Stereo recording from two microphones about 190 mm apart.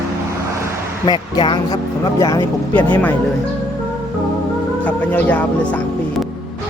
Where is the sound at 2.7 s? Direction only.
10° left (ahead or behind).